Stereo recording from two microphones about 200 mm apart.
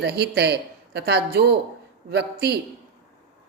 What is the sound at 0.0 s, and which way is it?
Speech, 55° right (ahead or behind).